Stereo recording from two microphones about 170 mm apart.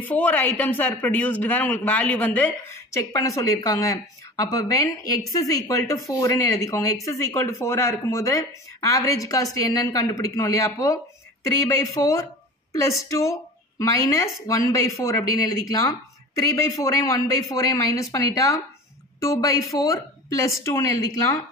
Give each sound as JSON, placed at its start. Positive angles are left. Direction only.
{"t": 0.0, "sound": "a man's voice", "side_deg": 10}